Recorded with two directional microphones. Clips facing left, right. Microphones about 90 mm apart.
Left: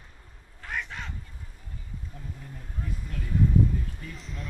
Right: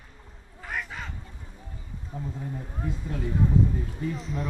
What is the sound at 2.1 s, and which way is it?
Speech, 25° right (ahead or behind).